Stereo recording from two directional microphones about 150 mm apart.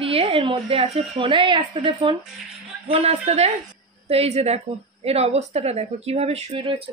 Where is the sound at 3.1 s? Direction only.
50° right (ahead or behind).